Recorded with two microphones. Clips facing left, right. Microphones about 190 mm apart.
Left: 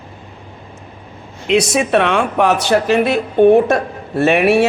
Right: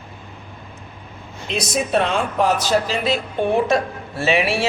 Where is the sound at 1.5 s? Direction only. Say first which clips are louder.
Left 7 dB; 75° left (ahead or behind).